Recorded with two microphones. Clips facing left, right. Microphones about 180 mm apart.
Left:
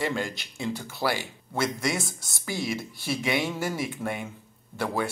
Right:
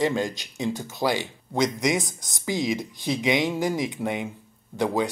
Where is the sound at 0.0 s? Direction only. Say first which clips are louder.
Right 5 dB; 15° right (ahead or behind).